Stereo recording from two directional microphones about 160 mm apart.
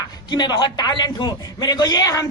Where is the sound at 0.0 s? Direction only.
25° left (ahead or behind).